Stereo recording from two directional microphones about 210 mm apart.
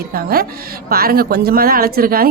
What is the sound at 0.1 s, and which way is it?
A woman's voice, 45° right (ahead or behind).